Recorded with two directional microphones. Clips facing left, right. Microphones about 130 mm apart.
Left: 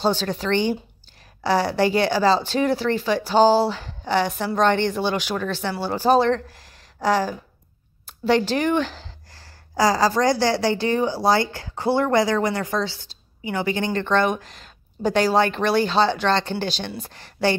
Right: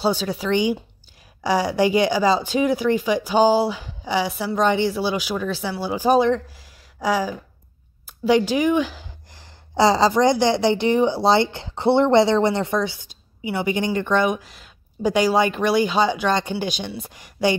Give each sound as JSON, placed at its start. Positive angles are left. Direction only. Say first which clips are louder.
{"t": 0.0, "sound": "a woman's voice", "louder": "even", "side_deg": -10}